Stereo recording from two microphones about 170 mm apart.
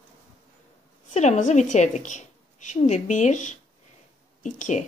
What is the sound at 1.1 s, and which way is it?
A woman's voice, 45° left (ahead or behind).